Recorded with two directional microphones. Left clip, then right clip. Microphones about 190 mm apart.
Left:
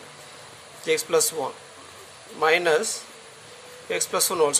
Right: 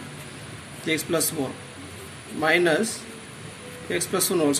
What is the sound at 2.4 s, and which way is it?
Speech, 55° left (ahead or behind).